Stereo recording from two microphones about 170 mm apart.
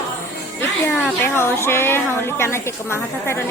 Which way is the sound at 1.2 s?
15° left (ahead or behind).